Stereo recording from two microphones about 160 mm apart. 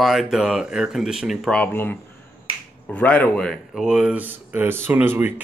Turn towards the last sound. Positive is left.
turn(degrees=-15)  # may be behind; listen again after turning